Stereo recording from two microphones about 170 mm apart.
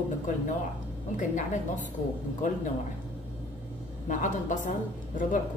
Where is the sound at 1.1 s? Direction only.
50° left (ahead or behind).